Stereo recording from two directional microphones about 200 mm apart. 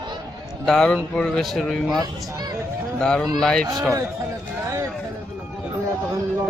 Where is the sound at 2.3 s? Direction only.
20° right (ahead or behind).